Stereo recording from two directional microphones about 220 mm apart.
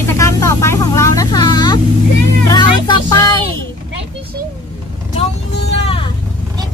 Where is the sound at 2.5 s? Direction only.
20° left (ahead or behind).